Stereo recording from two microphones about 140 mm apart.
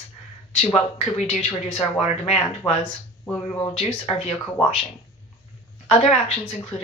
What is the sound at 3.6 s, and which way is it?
Speech, 40° left (ahead or behind).